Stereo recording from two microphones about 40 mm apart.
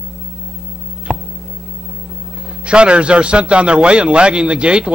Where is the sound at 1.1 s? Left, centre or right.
Right.